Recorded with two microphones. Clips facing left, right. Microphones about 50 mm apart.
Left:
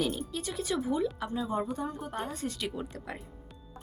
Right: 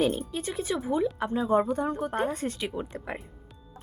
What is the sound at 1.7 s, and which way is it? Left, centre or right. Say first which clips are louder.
Speech: right 7 dB; right.